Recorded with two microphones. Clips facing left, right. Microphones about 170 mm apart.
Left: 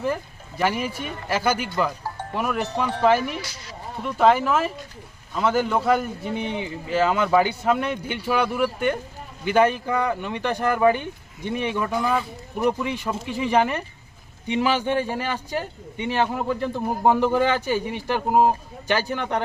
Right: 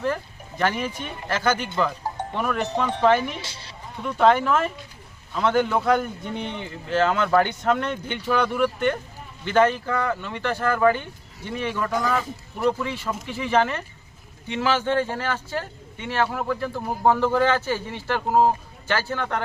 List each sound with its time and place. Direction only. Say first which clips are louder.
0.0 s a man's voice: even; 10° left (ahead or behind)
3.4 s speech: left 2 dB; 30° right (ahead or behind)
4.0 s a man's voice: even; 5° left (ahead or behind)